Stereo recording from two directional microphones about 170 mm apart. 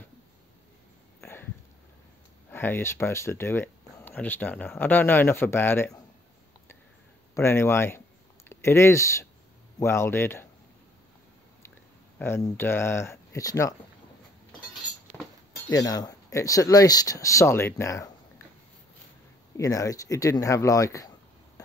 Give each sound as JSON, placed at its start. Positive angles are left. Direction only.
{"t": 1.2, "sound": "a sound", "side_deg": 15}
{"t": 2.5, "sound": "speech", "side_deg": 10}
{"t": 7.3, "sound": "speech", "side_deg": 15}
{"t": 12.2, "sound": "speech", "side_deg": 15}
{"t": 15.1, "sound": "a sound", "side_deg": 5}
{"t": 15.7, "sound": "speech", "side_deg": 20}
{"t": 19.5, "sound": "speech", "side_deg": 20}